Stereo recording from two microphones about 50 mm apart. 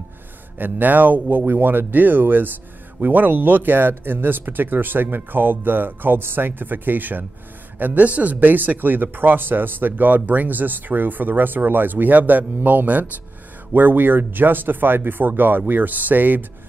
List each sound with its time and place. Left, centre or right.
0.6 s speech: right